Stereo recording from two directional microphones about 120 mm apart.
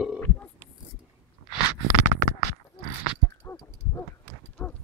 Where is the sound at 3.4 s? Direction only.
20° left (ahead or behind).